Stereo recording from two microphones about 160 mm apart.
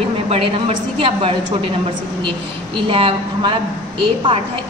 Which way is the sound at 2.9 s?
35° right (ahead or behind).